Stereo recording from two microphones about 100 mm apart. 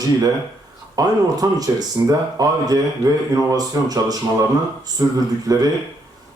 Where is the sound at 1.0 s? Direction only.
40° right (ahead or behind).